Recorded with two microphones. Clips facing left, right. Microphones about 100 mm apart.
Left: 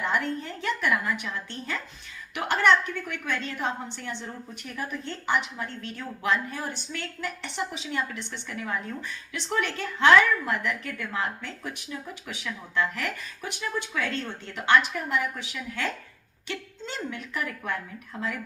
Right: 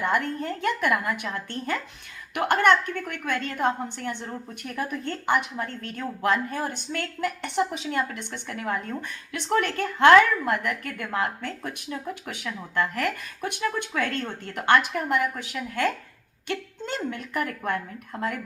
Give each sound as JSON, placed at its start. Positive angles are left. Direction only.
{"t": 0.0, "sound": "a woman's voice", "side_deg": -50}